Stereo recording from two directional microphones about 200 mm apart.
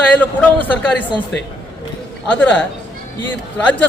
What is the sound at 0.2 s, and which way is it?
Speech, 10° left (ahead or behind).